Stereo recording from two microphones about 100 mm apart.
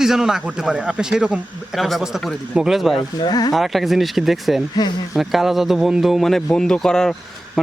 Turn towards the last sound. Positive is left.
turn(degrees=5)  # may be behind; listen again after turning